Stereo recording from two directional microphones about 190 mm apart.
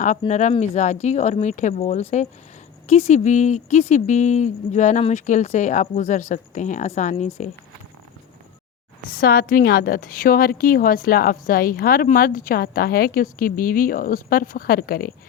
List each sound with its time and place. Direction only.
0.3 s speech: 40° left (ahead or behind)
9.1 s a woman's voice: 50° left (ahead or behind)